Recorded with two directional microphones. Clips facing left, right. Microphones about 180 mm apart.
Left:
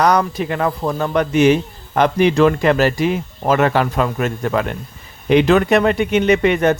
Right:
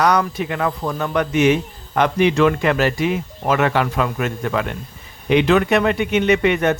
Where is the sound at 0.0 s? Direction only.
35° left (ahead or behind).